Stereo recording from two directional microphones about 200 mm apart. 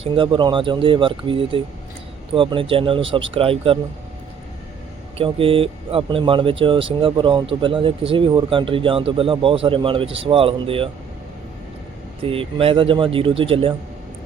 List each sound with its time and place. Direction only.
0.0 s speech: 25° right (ahead or behind)
5.1 s speech: 25° right (ahead or behind)
12.2 s speech: 30° right (ahead or behind)